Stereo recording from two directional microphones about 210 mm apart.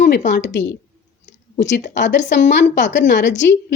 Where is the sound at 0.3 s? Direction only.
55° left (ahead or behind).